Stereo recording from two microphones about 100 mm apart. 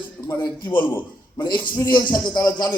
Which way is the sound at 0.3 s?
40° left (ahead or behind).